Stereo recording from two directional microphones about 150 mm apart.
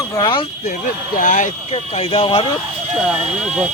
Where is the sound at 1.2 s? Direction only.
55° left (ahead or behind); by 2.5 s 35° left (ahead or behind).